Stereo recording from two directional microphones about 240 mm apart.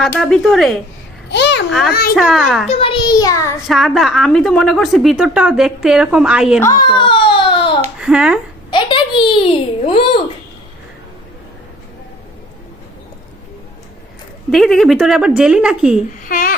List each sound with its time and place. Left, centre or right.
0.0 s speech: centre
1.3 s a child's voice: left
2.1 s speech: centre
2.6 s a child's voice: left
3.7 s speech: centre
6.6 s baby cry: centre
7.9 s speech: centre
8.7 s a child's voice: centre
14.5 s speech: centre
16.3 s a sound: left